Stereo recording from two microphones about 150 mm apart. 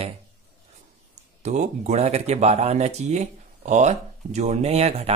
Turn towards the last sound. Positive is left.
turn(degrees=-45)  # may be behind; listen again after turning